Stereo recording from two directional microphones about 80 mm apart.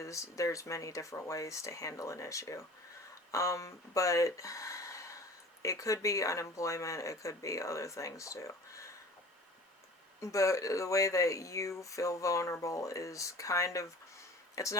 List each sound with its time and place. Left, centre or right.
0.0 s speech: left
10.2 s speech: left